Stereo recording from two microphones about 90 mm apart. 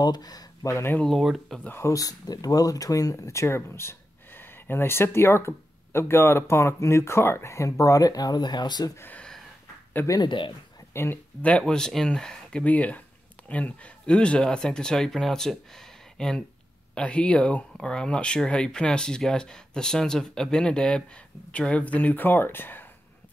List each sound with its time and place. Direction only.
0.0 s speech: 50° left (ahead or behind)
1.0 s speech: centre (ahead or behind)
1.6 s speech: 20° left (ahead or behind)
1.9 s speech: 40° left (ahead or behind)
8.9 s speech: 25° left (ahead or behind)
10.2 s speech: 65° left (ahead or behind)
10.9 s speech: 25° left (ahead or behind)
11.4 s speech: 10° left (ahead or behind)